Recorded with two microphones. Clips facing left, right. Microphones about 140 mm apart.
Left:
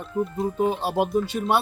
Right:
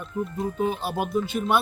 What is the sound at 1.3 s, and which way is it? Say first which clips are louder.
Speech: even; 40° left (ahead or behind).